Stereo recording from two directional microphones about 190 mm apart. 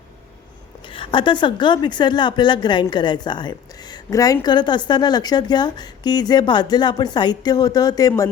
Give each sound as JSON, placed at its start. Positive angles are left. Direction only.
{"t": 0.9, "sound": "a woman's voice", "side_deg": 25}